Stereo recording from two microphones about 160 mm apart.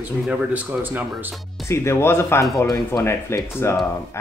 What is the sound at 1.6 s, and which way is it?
Speech, 15° left (ahead or behind).